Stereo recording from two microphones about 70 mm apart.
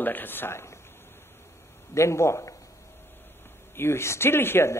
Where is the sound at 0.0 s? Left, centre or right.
Left.